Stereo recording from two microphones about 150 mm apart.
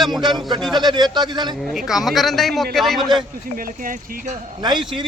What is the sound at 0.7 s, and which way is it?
Speech, 30° right (ahead or behind).